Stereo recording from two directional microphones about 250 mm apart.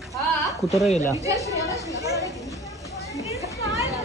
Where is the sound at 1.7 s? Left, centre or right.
Centre.